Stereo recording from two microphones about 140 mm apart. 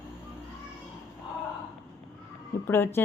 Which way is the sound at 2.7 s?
15° left (ahead or behind).